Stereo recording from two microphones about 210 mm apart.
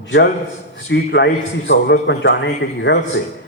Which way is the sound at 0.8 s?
55° left (ahead or behind).